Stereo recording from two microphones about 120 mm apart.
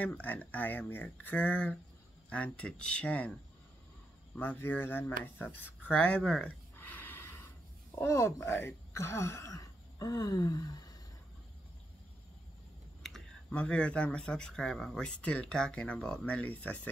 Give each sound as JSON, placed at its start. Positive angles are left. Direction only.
{"t": 0.0, "sound": "speech", "side_deg": 15}
{"t": 4.4, "sound": "speech", "side_deg": 15}
{"t": 6.8, "sound": "snort", "side_deg": 15}
{"t": 7.9, "sound": "speech", "side_deg": 20}
{"t": 13.0, "sound": "speech", "side_deg": 5}